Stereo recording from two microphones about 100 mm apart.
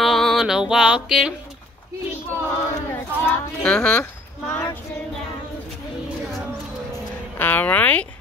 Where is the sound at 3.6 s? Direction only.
15° left (ahead or behind).